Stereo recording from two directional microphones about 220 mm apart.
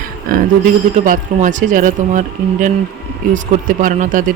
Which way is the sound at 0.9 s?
35° right (ahead or behind).